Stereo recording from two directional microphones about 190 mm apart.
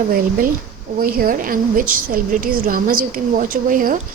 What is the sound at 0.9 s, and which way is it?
A woman's voice, 50° right (ahead or behind).